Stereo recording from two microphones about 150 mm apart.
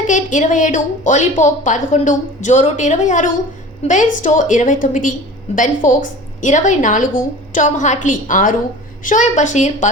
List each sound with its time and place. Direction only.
0.1 s a woman's voice: 55° left (ahead or behind)